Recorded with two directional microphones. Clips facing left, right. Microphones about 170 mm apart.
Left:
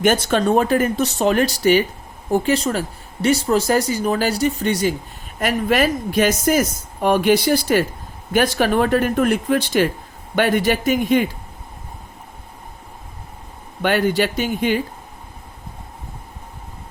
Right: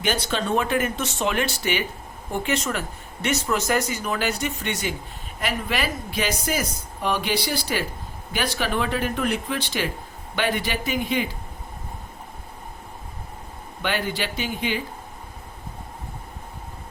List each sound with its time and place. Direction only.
0.0 s speech: 45° left (ahead or behind)
13.8 s speech: 45° left (ahead or behind)